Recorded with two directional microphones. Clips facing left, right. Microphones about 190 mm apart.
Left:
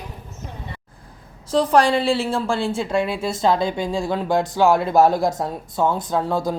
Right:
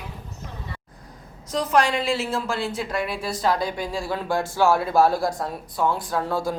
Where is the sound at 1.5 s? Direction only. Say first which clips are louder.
Left 5 dB; 30° left (ahead or behind).